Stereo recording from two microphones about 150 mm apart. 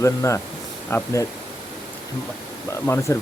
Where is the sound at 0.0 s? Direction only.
20° left (ahead or behind).